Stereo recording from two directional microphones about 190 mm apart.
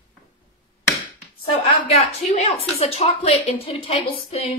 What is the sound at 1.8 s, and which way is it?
Speech, 30° left (ahead or behind).